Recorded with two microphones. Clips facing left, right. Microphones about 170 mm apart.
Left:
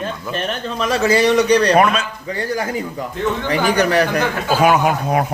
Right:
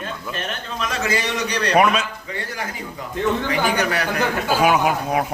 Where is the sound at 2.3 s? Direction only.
40° left (ahead or behind).